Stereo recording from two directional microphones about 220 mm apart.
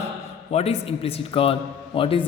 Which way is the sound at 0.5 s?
30° left (ahead or behind).